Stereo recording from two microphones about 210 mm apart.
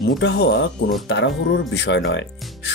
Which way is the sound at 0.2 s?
55° left (ahead or behind).